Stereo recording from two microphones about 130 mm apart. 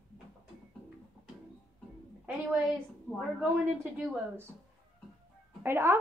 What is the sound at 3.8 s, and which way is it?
Speech, 10° right (ahead or behind).